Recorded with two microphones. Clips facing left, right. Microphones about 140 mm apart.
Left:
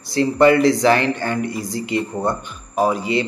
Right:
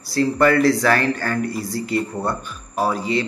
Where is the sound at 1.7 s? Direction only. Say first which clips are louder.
Left 1 dB; 20° left (ahead or behind).